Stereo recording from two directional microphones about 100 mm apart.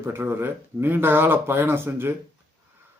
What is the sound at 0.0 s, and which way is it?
Speech, 25° right (ahead or behind).